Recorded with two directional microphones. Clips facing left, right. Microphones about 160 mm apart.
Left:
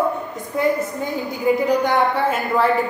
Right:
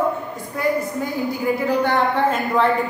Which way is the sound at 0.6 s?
20° left (ahead or behind).